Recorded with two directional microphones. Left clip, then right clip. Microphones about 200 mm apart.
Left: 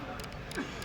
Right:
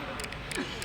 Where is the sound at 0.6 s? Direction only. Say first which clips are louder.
Right 2 dB; 30° right (ahead or behind).